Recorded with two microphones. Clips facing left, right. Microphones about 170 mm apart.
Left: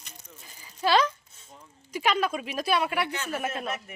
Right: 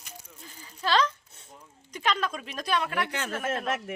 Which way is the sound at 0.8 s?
10° left (ahead or behind).